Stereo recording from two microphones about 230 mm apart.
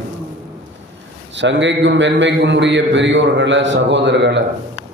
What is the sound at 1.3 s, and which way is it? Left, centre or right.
A man's voice, right.